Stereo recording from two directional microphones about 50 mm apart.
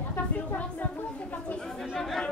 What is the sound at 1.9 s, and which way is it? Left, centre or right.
Chatter, centre.